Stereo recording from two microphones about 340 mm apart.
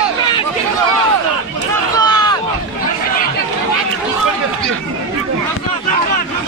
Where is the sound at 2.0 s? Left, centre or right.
Centre.